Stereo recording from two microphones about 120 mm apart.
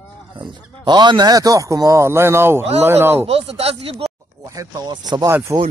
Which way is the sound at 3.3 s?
55° right (ahead or behind).